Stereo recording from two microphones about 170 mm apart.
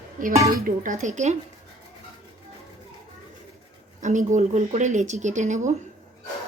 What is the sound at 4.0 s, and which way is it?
A woman's voice, 45° right (ahead or behind).